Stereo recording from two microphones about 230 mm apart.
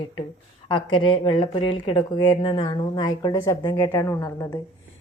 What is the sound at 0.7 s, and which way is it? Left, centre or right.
Speech, left.